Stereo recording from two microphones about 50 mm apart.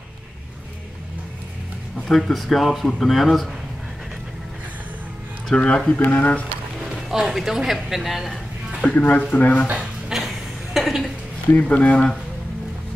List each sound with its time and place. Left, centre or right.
2.0 s speech: centre
5.5 s speech: centre
5.9 s speech: left
7.1 s speech: centre
8.9 s speech: left
9.8 s a sound: centre
11.5 s speech: left